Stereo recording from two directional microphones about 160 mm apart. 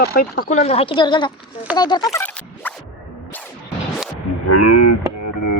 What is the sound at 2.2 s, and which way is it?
Zipper, 10° left (ahead or behind).